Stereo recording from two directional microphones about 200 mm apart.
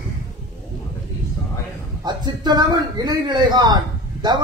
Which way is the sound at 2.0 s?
20° right (ahead or behind).